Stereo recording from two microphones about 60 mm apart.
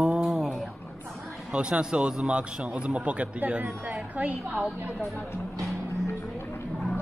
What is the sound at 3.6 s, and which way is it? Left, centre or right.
A man's voice, right.